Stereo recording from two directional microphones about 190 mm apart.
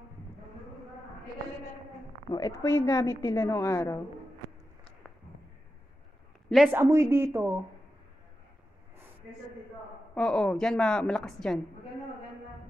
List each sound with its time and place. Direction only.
2.3 s a woman's voice: 15° left (ahead or behind)
6.5 s a woman's voice: 5° right (ahead or behind)
10.1 s a woman's voice: 5° left (ahead or behind)